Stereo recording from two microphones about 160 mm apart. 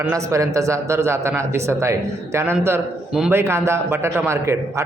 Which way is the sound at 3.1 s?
5° right (ahead or behind).